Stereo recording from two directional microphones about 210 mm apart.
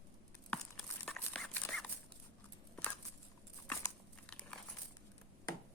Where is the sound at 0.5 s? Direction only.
5° left (ahead or behind).